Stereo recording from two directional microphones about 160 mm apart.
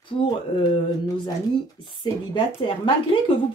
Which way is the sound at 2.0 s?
35° left (ahead or behind).